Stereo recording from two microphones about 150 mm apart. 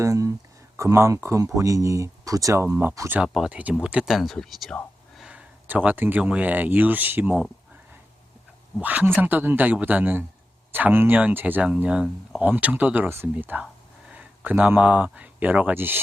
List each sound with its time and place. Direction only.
0.0 s speech: 20° right (ahead or behind)
3.3 s speech: 5° right (ahead or behind)
8.8 s speech: 10° right (ahead or behind)